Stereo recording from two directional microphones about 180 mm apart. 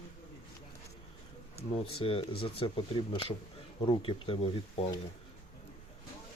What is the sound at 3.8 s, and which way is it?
Speech, 30° left (ahead or behind).